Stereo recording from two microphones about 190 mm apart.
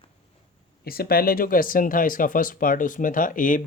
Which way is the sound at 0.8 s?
50° left (ahead or behind).